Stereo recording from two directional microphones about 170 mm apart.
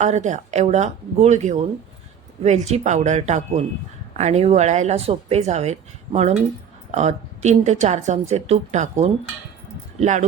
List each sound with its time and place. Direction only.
0.0 s speech: 45° right (ahead or behind)